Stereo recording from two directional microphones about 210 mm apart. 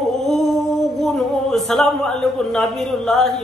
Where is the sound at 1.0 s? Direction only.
Centre (ahead or behind).